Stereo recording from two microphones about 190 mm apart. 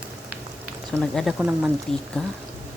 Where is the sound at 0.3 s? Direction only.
Centre (ahead or behind).